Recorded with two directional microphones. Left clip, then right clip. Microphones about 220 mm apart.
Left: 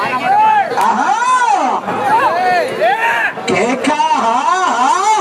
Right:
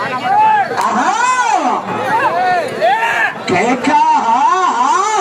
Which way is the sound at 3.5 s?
45° left (ahead or behind).